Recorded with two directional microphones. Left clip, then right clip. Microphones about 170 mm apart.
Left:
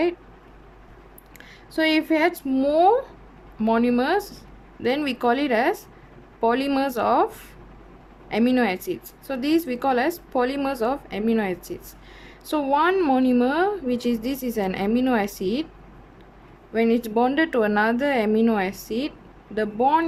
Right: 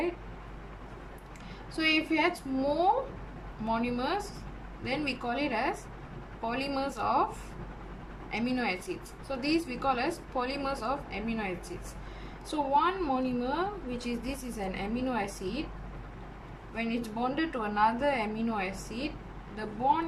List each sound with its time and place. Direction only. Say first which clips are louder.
1.7 s speech: left 7 dB; 50° left (ahead or behind)
8.3 s speech: left 10 dB; 55° left (ahead or behind)
16.7 s speech: left 14 dB; 55° left (ahead or behind)